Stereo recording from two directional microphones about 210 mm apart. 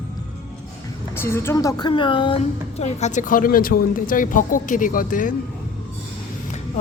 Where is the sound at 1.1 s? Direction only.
10° left (ahead or behind); by 5.4 s 40° left (ahead or behind).